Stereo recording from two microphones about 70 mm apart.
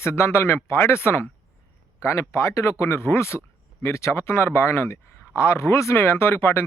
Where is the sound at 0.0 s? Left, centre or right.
Left.